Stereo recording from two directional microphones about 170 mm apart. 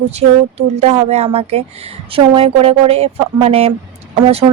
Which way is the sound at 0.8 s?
40° right (ahead or behind).